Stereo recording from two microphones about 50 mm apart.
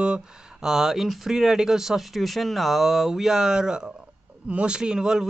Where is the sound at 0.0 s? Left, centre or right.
Centre.